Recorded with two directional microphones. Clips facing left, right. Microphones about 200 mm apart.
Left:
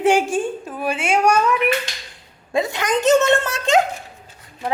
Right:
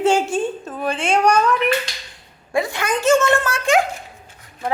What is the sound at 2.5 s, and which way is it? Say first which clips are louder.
Speech: left 1 dB; 20° left (ahead or behind).